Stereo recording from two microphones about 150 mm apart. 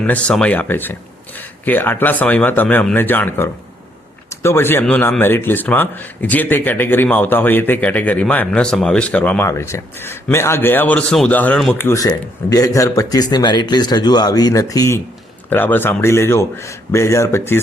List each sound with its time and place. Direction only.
0.0 s a man's voice: 5° left (ahead or behind)